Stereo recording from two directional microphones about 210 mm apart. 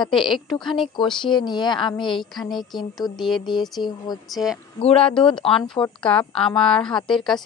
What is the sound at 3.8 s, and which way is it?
Speech, 20° left (ahead or behind).